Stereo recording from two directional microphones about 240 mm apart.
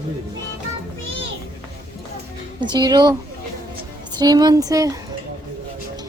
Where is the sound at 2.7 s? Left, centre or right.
Centre.